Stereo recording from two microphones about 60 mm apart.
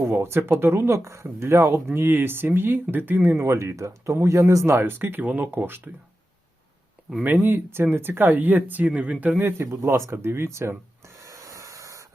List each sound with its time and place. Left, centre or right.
0.0 s speech: right
0.9 s speech: right
3.3 s speech: right
7.3 s speech: right
9.4 s speech: right
9.8 s a sound: right